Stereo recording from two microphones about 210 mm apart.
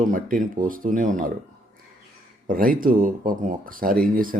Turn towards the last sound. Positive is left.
turn(degrees=-40)  # may be behind; listen again after turning